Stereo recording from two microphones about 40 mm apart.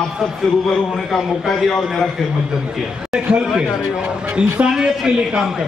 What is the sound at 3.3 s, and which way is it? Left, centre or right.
A man's voice, right.